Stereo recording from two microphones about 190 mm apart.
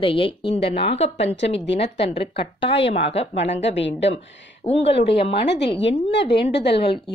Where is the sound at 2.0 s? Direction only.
30° left (ahead or behind).